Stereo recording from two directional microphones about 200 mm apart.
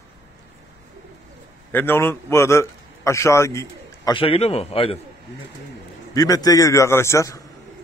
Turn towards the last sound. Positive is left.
turn(degrees=15)  # may be behind; listen again after turning